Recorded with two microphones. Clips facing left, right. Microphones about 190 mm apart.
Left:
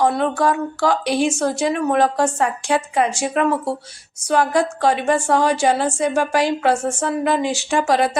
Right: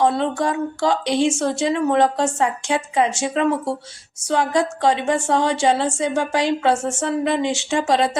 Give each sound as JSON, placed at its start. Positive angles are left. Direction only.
{"t": 0.0, "sound": "speech", "side_deg": -25}